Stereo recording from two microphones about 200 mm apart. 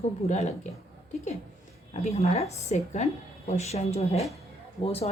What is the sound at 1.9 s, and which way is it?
Speech, 30° left (ahead or behind).